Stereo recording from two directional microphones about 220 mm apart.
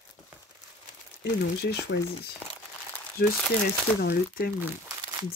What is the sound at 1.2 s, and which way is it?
Speech, 50° left (ahead or behind).